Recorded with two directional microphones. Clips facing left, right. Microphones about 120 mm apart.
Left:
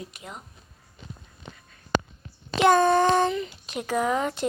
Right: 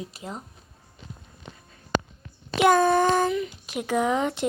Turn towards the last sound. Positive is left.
turn(degrees=-15)  # may be behind; listen again after turning